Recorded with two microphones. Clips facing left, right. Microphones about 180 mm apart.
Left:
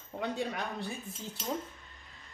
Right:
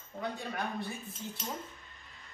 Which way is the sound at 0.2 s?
75° left (ahead or behind).